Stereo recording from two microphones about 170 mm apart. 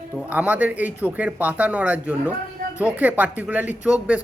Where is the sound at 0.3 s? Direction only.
10° right (ahead or behind).